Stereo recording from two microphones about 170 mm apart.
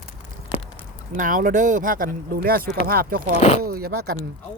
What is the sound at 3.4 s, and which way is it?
Speech, 40° left (ahead or behind).